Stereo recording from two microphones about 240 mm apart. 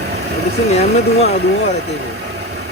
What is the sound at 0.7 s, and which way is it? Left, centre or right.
Speech, left.